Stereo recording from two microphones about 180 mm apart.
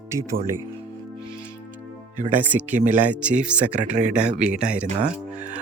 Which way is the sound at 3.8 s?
40° right (ahead or behind).